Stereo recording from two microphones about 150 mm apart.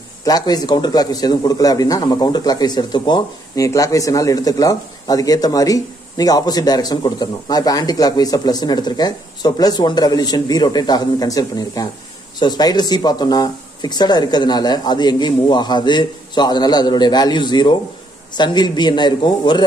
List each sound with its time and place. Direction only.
0.2 s a man's voice: 25° left (ahead or behind)